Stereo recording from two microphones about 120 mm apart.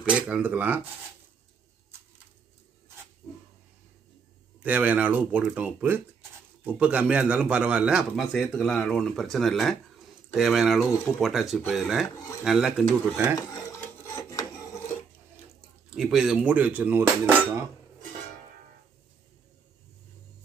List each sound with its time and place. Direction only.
0.1 s cutlery: 10° right (ahead or behind)
4.6 s cutlery: 15° right (ahead or behind)
8.3 s speech: 5° left (ahead or behind)
12.2 s speech: 25° left (ahead or behind)
12.4 s speech: 5° right (ahead or behind)
13.5 s filing: 25° left (ahead or behind)
15.9 s cutlery: 5° right (ahead or behind)